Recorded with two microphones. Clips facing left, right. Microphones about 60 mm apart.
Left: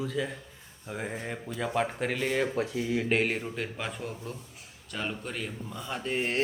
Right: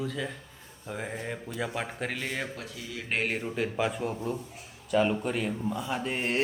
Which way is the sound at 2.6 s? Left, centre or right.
Left.